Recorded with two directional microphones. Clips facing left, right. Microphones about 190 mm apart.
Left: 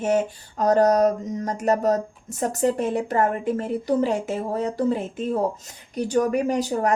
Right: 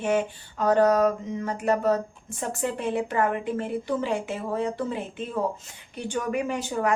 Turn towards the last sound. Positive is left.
turn(degrees=40)  # may be behind; listen again after turning